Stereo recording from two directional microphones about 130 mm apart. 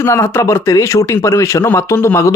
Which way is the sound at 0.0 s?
20° left (ahead or behind).